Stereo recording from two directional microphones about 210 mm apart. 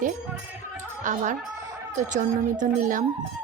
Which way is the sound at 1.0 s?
40° right (ahead or behind).